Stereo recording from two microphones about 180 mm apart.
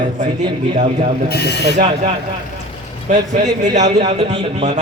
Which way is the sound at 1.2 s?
65° left (ahead or behind).